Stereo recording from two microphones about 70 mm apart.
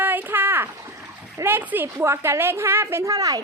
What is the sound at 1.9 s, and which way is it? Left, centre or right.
A woman's voice, right.